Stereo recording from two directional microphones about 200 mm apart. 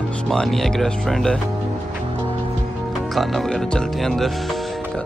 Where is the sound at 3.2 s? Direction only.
Centre (ahead or behind).